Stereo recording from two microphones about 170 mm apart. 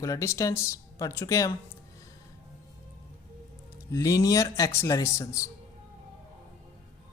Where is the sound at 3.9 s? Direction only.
20° left (ahead or behind).